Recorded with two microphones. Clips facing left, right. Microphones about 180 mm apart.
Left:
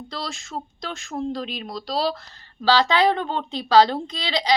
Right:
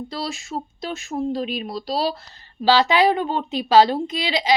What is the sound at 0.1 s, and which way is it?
A woman's voice, 15° right (ahead or behind).